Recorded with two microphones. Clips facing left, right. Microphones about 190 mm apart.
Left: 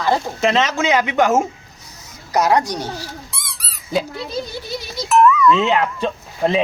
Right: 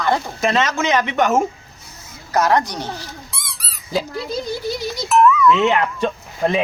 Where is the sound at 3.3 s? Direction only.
Centre (ahead or behind).